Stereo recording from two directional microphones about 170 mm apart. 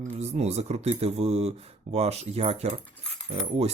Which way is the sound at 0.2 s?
40° right (ahead or behind).